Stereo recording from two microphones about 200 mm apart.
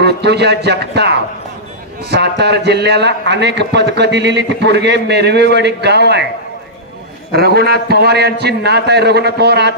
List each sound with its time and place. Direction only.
0.0 s a man's voice: 55° right (ahead or behind)
7.3 s a man's voice: 50° right (ahead or behind)